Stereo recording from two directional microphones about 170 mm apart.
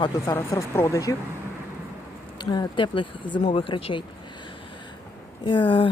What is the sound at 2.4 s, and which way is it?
A woman's voice, 25° left (ahead or behind).